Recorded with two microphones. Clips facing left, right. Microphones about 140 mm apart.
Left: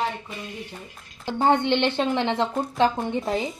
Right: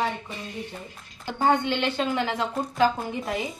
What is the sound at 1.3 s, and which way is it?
A woman's voice, 25° left (ahead or behind).